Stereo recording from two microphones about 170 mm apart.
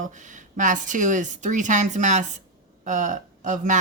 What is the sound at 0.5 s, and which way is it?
Speech, 50° right (ahead or behind).